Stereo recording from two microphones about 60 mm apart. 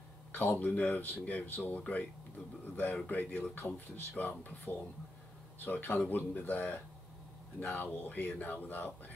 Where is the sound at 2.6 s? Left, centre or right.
Left.